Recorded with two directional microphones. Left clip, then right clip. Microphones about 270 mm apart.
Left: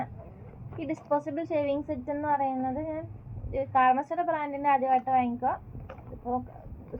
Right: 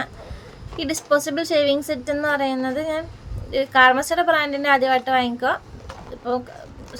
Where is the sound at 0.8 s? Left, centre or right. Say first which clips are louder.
Right 9 dB; right.